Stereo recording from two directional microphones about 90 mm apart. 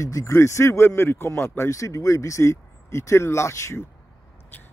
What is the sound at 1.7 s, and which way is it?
Speech, 35° left (ahead or behind).